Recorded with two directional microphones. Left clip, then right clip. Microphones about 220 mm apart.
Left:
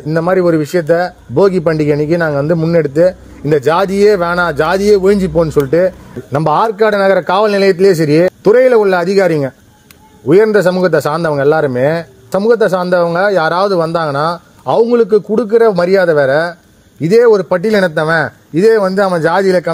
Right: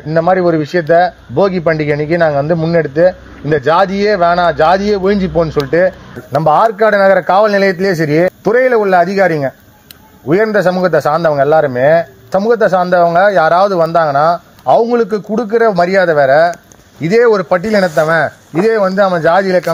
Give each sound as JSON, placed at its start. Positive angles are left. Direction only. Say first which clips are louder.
{"t": 0.0, "sound": "a man's voice", "louder": "right 1 dB", "side_deg": 55}